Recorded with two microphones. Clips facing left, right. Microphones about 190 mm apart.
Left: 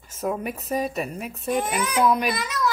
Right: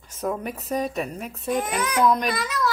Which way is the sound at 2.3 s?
20° left (ahead or behind).